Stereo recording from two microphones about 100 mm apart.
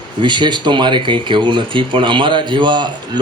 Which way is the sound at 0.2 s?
50° right (ahead or behind).